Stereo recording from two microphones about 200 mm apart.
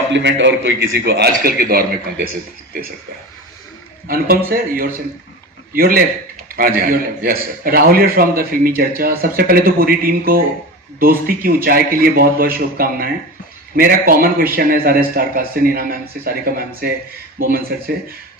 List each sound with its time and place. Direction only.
0.1 s a man's voice: 65° right (ahead or behind)
4.1 s speech: 45° right (ahead or behind)